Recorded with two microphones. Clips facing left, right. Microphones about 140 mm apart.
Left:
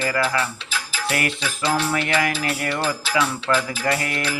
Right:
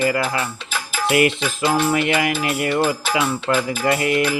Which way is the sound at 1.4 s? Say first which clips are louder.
Right 3 dB; 50° right (ahead or behind).